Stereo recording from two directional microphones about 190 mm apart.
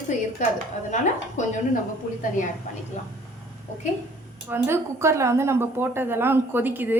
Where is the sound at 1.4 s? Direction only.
40° left (ahead or behind).